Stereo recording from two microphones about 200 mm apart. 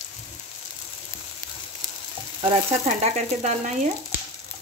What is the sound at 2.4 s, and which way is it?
Frying, 30° right (ahead or behind).